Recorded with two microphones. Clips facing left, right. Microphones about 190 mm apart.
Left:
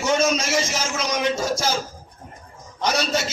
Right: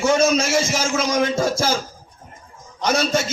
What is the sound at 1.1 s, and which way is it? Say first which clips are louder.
Speech: right 1 dB; 50° right (ahead or behind).